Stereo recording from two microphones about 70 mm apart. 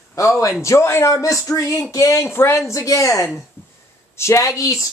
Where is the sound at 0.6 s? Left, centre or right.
Left.